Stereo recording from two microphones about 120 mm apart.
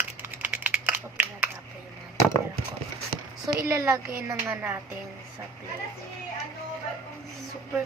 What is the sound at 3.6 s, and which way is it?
Speech, 25° right (ahead or behind).